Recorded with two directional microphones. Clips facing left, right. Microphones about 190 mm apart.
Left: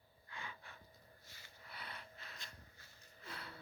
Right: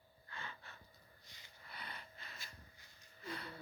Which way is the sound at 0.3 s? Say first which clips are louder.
Even; 10° left (ahead or behind).